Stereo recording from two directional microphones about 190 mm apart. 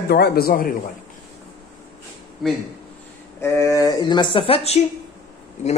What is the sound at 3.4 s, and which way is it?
Speech, 15° left (ahead or behind).